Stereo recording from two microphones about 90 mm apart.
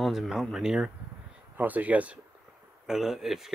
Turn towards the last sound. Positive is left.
turn(degrees=-5)  # may be behind; listen again after turning